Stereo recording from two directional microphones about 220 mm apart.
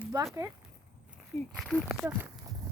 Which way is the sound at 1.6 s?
Centre (ahead or behind).